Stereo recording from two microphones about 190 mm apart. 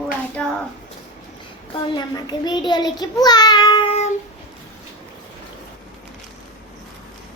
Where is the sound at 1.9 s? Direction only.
20° left (ahead or behind).